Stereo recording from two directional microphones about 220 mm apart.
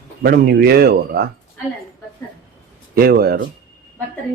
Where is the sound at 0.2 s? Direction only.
45° right (ahead or behind).